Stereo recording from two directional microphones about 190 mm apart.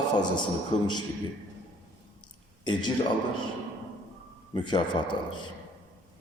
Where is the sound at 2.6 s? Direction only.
25° left (ahead or behind).